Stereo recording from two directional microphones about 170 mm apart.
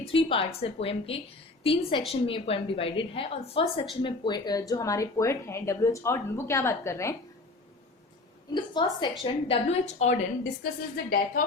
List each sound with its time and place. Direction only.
0.1 s a woman's voice: 35° left (ahead or behind); by 7.2 s 15° left (ahead or behind)
8.5 s a woman's voice: 25° left (ahead or behind)
10.6 s speech: 60° left (ahead or behind)